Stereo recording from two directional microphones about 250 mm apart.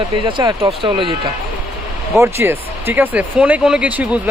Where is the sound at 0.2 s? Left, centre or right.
Centre.